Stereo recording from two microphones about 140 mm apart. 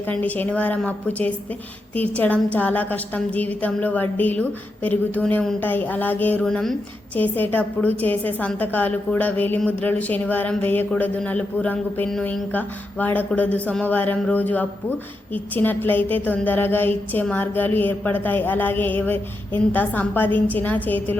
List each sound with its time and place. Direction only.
0.1 s a woman's voice: 10° left (ahead or behind)